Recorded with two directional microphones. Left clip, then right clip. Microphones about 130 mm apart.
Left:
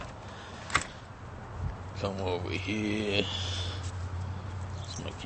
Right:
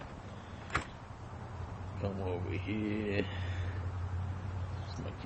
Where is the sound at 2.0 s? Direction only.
5° left (ahead or behind).